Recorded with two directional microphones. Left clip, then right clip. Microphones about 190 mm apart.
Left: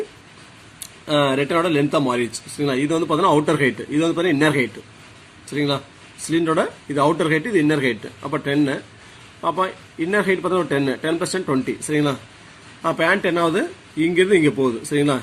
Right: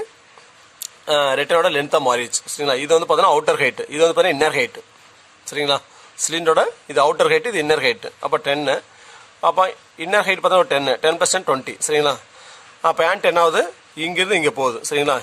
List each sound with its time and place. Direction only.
0.8 s speech: 55° right (ahead or behind)